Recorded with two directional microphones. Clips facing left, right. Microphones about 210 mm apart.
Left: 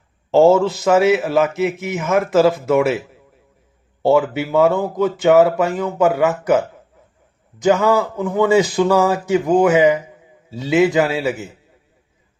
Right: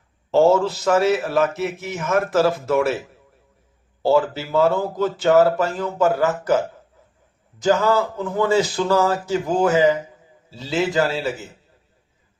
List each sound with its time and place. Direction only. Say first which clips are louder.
0.4 s a man's voice: left 4 dB; 20° left (ahead or behind)
4.0 s speech: left 3 dB; 15° left (ahead or behind)
7.5 s speech: left 3 dB; 15° left (ahead or behind)